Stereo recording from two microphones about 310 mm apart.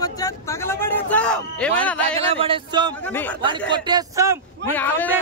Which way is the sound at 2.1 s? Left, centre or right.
Centre.